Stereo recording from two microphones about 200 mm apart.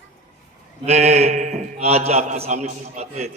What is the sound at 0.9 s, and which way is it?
A man's voice, 30° right (ahead or behind).